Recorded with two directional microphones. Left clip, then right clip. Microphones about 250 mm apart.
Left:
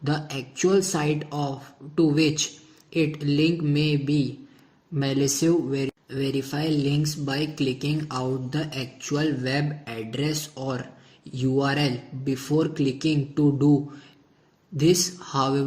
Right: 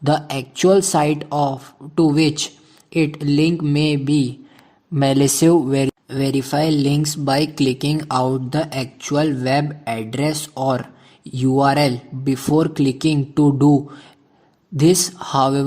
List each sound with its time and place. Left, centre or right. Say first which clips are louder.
0.0 s speech: right 10 dB; right
14.8 s speech: right 6 dB; right